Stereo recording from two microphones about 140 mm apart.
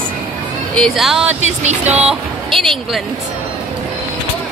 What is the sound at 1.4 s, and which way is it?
Speech, 55° right (ahead or behind).